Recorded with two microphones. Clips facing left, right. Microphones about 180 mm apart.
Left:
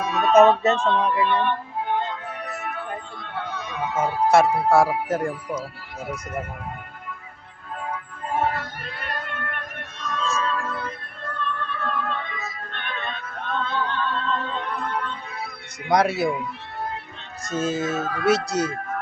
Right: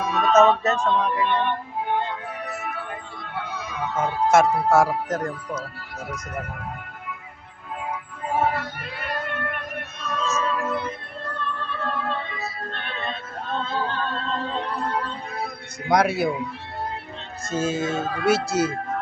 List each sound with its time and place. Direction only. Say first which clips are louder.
0.0 s music: even; 5° left (ahead or behind)
0.7 s a sound: left 1 dB; 10° right (ahead or behind)
2.5 s music: left 1 dB; centre (ahead or behind)
7.9 s music: right 1 dB; 5° right (ahead or behind)
11.6 s music: right 2 dB; 30° right (ahead or behind)
15.9 s speech: even; centre (ahead or behind)
17.6 s speech: even; centre (ahead or behind)
18.0 s speech: even; 20° right (ahead or behind)
18.3 s speech: even; centre (ahead or behind)